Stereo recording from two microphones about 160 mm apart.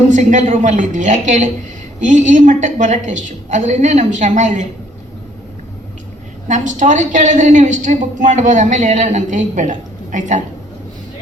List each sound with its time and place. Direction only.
0.1 s a woman's voice: 50° right (ahead or behind)
6.5 s a woman's voice: 50° right (ahead or behind)